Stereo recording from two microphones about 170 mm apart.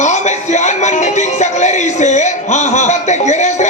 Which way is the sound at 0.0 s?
45° left (ahead or behind).